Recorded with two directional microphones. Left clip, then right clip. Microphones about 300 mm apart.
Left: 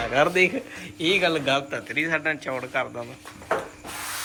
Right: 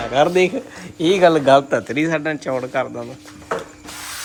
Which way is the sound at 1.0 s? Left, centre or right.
Right.